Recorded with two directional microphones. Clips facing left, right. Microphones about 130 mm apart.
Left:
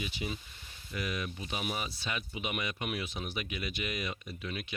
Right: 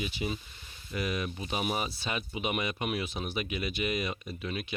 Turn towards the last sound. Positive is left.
turn(degrees=-30)  # may be behind; listen again after turning